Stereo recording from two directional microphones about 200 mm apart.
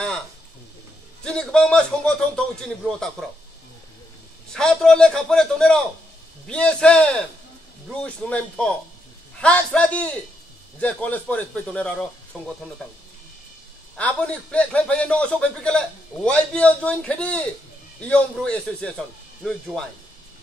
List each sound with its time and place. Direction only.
1.2 s a man's voice: 5° left (ahead or behind)
4.5 s a man's voice: 5° left (ahead or behind)
13.9 s a man's voice: 5° left (ahead or behind)